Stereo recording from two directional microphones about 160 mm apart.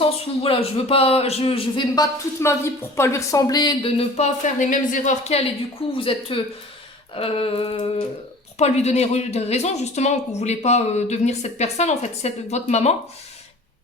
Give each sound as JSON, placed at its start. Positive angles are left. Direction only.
{"t": 0.0, "sound": "a man's voice", "side_deg": 35}
{"t": 2.4, "sound": "speech", "side_deg": 15}
{"t": 6.0, "sound": "a man's voice", "side_deg": 35}